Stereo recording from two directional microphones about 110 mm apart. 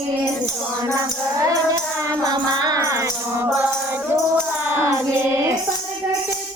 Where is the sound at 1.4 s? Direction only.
30° right (ahead or behind).